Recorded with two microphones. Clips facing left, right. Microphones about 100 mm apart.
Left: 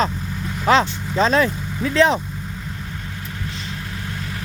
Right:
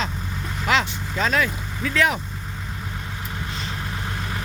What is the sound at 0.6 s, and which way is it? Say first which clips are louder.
Speech: left 6 dB; 35° left (ahead or behind).